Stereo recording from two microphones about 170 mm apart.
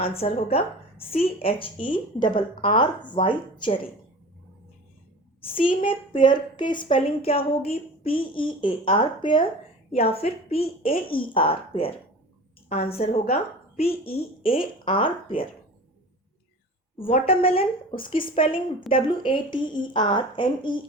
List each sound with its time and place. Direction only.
0.0 s a woman's voice: 35° left (ahead or behind)
5.4 s a woman's voice: 30° left (ahead or behind)
17.2 s a woman's voice: 35° left (ahead or behind)